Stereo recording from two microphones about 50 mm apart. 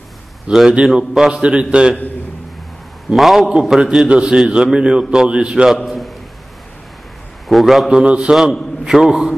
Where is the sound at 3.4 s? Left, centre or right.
Centre.